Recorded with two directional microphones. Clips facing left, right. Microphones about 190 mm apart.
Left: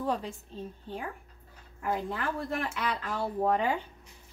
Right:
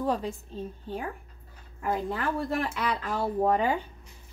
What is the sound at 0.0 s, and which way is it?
Speech, 40° right (ahead or behind).